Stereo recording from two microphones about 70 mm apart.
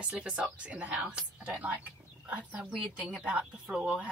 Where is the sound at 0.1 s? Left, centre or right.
Centre.